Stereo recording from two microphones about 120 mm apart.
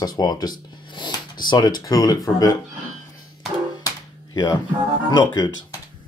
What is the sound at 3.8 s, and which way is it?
Music, 35° left (ahead or behind).